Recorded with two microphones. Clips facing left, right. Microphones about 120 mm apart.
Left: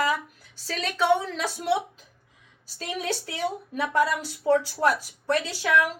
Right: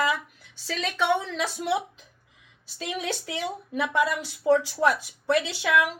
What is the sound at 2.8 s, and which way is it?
A woman's voice, 40° left (ahead or behind).